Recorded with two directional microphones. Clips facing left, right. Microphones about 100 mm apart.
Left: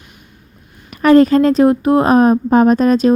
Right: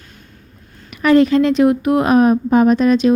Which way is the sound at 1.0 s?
40° left (ahead or behind).